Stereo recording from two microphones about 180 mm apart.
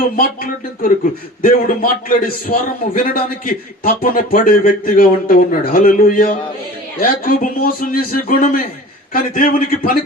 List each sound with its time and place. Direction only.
1.4 s a man's voice: 50° left (ahead or behind)